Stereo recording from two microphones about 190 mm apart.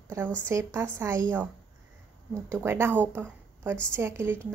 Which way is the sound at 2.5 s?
10° right (ahead or behind).